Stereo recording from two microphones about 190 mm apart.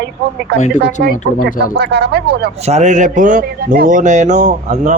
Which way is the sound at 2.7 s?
35° right (ahead or behind).